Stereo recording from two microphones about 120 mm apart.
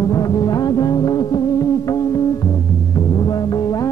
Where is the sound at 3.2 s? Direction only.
35° left (ahead or behind).